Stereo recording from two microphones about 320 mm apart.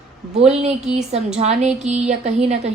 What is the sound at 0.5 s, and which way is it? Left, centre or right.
A woman's voice, centre.